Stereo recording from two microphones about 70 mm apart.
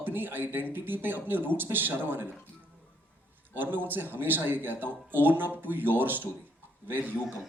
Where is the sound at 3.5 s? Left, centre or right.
Right.